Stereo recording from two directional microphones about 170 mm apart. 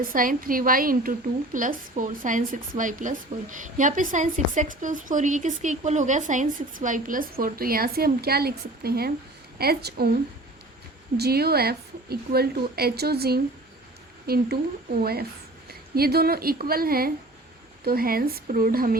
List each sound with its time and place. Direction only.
0.0 s a woman's voice: 55° right (ahead or behind)
11.2 s a woman's voice: 65° right (ahead or behind)
16.0 s a woman's voice: 65° right (ahead or behind)